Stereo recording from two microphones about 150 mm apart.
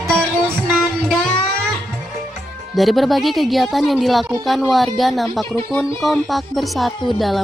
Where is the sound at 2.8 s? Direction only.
Centre (ahead or behind).